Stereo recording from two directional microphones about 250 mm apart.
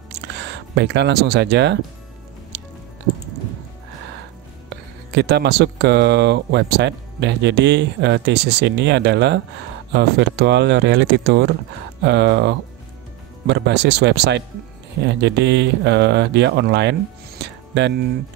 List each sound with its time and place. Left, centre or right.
0.1 s music: right
5.1 s speech: right